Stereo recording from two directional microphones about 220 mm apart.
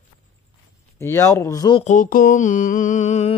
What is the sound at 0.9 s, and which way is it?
Speech, 15° left (ahead or behind).